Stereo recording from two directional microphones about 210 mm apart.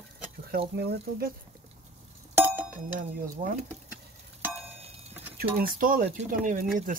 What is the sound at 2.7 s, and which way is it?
Speech, 40° right (ahead or behind).